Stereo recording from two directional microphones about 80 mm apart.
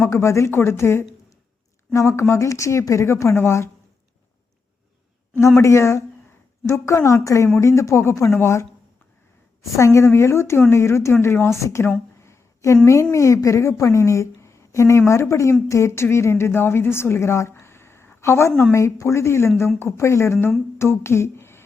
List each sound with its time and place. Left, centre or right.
0.0 s a woman's voice: left
5.5 s a woman's voice: left
9.7 s a woman's voice: left
12.2 s a sound: left
13.1 s a woman's voice: left